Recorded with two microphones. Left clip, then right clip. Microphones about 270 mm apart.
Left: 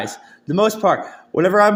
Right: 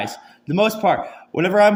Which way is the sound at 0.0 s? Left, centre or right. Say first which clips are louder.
Even; centre.